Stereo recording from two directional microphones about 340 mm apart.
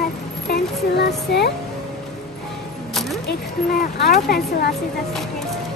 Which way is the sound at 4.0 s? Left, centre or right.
Left.